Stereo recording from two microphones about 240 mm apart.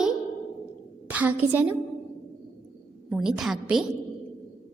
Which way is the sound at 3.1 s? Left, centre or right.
Centre.